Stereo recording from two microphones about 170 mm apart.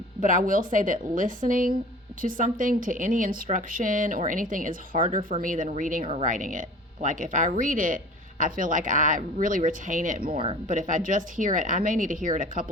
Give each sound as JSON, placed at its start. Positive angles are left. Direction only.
{"t": 0.2, "sound": "speech", "side_deg": -50}
{"t": 10.3, "sound": "speech", "side_deg": -30}
{"t": 10.7, "sound": "speech", "side_deg": -50}